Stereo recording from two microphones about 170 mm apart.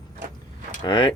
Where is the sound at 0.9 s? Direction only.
30° left (ahead or behind).